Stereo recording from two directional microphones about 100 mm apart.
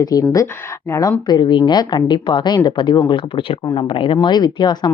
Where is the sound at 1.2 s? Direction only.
45° left (ahead or behind).